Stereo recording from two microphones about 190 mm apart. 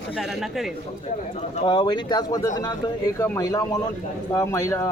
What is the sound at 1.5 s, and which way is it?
A man's voice, 25° left (ahead or behind).